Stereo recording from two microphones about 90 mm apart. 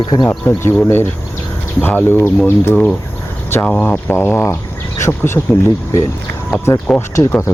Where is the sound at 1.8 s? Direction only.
25° left (ahead or behind).